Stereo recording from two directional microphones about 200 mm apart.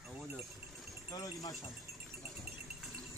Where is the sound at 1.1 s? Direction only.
20° left (ahead or behind).